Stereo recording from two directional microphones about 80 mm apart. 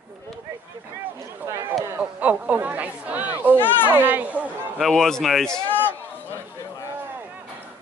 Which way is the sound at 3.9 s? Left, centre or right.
Right.